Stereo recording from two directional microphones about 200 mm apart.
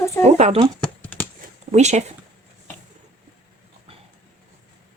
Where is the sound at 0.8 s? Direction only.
10° left (ahead or behind).